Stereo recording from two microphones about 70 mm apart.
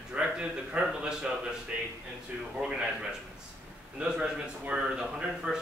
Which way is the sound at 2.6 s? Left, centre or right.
Centre.